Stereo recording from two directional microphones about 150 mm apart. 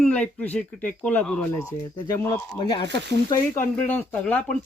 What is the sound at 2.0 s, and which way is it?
Speech, 15° left (ahead or behind).